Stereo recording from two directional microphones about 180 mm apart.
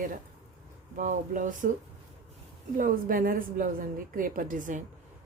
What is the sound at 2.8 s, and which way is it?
A woman's voice, 50° right (ahead or behind).